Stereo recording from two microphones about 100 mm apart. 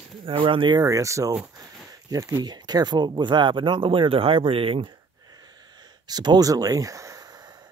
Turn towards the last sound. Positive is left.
turn(degrees=-35)  # may be behind; listen again after turning